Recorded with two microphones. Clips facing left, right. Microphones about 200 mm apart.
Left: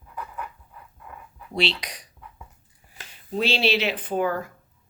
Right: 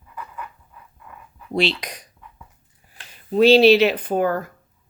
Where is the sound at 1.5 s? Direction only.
50° right (ahead or behind).